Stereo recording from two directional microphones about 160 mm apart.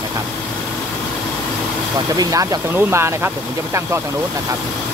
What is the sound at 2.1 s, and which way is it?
Speech, 20° right (ahead or behind).